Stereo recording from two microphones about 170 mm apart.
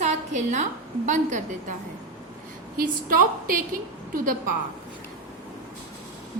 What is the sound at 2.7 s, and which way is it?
Speech, 55° right (ahead or behind).